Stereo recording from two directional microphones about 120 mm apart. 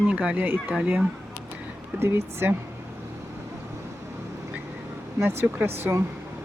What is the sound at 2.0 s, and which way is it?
Speech, 20° right (ahead or behind).